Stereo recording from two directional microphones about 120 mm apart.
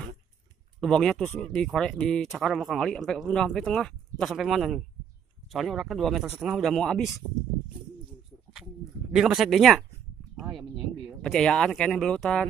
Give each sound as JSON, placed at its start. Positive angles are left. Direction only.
{"t": 0.7, "sound": "a man's voice", "side_deg": 5}
{"t": 6.5, "sound": "speech", "side_deg": 5}
{"t": 8.5, "sound": "speech", "side_deg": -5}